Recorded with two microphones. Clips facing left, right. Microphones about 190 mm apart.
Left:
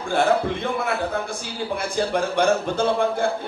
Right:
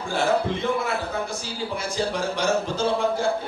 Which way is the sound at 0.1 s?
55° left (ahead or behind).